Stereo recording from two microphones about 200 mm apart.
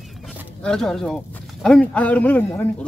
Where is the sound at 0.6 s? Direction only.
5° left (ahead or behind).